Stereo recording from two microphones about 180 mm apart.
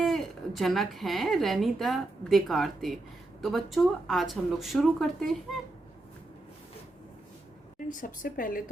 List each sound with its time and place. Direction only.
0.0 s speech: centre (ahead or behind)
7.9 s speech: 45° left (ahead or behind)